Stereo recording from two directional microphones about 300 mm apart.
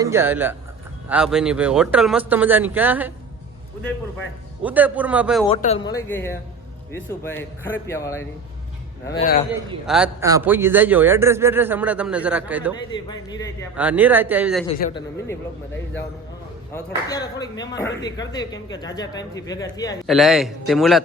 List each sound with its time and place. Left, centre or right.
0.0 s a man's voice: centre
4.6 s a man's voice: centre
5.5 s speech: left
9.8 s a man's voice: centre
13.1 s speech: centre
13.7 s a man's voice: centre
14.8 s speech: left
16.7 s speech: centre
20.1 s a man's voice: centre